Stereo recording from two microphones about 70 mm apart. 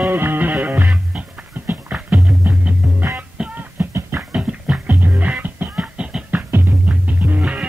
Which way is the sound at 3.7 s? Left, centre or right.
Right.